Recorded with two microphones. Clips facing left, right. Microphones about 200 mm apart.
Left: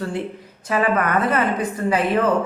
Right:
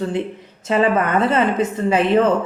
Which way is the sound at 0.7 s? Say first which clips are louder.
Right 3 dB; 25° right (ahead or behind).